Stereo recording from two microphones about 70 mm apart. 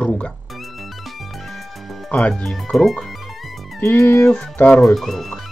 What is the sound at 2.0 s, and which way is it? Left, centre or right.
Speech, centre.